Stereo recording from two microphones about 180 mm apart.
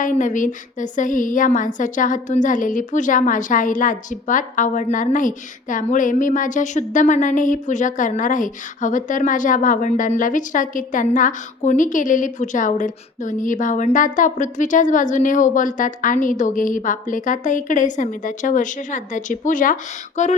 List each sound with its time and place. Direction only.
0.0 s a woman's voice: 45° left (ahead or behind)